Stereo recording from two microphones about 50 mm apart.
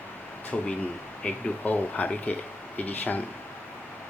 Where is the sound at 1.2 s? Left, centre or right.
Left.